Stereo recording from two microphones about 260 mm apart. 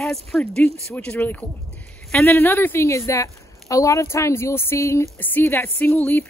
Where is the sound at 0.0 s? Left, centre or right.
Centre.